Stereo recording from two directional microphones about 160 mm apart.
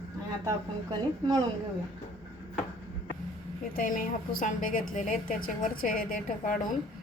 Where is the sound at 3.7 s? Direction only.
60° left (ahead or behind).